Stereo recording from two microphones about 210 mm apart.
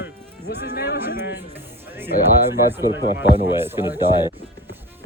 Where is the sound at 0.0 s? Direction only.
50° left (ahead or behind).